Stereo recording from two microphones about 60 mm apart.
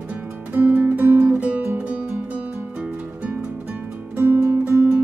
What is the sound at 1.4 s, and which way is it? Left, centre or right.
Music, right.